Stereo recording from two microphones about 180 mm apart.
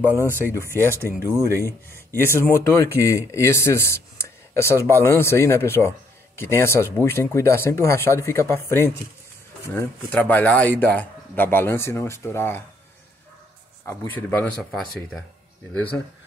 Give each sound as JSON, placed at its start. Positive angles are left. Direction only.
{"t": 0.0, "sound": "speech", "side_deg": 15}
{"t": 1.2, "sound": "speech", "side_deg": -15}
{"t": 1.6, "sound": "speech", "side_deg": 15}
{"t": 13.8, "sound": "speech", "side_deg": 10}